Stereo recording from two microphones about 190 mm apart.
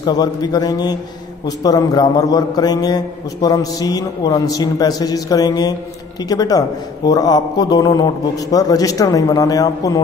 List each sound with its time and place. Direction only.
0.0 s a man's voice: 20° left (ahead or behind)